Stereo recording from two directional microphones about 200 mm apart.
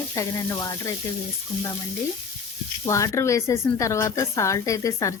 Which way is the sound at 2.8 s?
15° left (ahead or behind).